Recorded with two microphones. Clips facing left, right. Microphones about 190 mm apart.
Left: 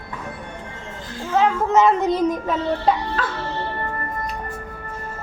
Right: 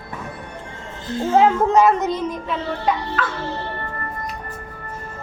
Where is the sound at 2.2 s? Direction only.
40° left (ahead or behind).